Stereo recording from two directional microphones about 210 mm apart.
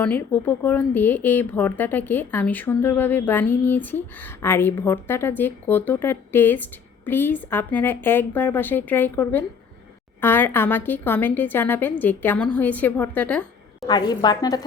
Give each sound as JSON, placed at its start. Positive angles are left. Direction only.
{"t": 0.0, "sound": "speech", "side_deg": 10}
{"t": 13.8, "sound": "a woman's voice", "side_deg": 20}